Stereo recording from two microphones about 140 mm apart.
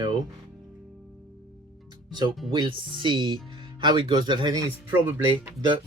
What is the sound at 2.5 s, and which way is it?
Speech, 35° right (ahead or behind).